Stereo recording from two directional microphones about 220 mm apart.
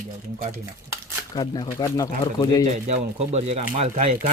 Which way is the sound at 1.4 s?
15° left (ahead or behind).